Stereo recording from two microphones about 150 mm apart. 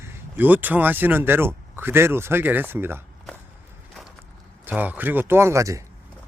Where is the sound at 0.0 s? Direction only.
15° right (ahead or behind).